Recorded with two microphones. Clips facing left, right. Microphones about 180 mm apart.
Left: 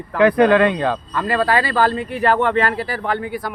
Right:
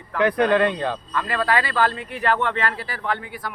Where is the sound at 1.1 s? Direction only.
35° left (ahead or behind).